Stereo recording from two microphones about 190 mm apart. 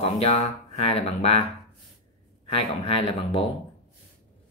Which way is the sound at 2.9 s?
30° left (ahead or behind).